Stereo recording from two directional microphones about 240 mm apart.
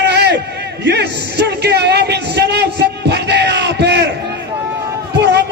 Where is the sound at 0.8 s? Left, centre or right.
Right.